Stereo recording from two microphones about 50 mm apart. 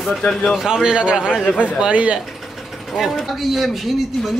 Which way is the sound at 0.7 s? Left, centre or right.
Centre.